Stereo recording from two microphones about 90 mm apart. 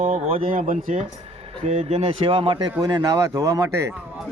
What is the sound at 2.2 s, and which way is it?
Speech, 85° right.